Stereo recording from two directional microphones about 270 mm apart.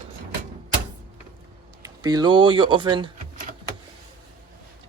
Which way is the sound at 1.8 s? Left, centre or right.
Centre.